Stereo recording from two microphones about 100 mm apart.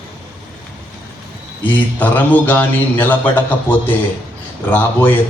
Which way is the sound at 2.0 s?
20° left (ahead or behind).